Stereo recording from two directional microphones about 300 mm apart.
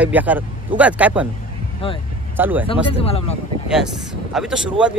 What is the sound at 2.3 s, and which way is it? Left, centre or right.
Speech, centre.